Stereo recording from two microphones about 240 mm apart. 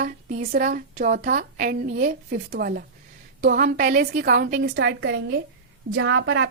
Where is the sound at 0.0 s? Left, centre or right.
Right.